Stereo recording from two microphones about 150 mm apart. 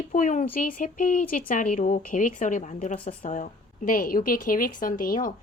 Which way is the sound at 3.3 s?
55° left (ahead or behind).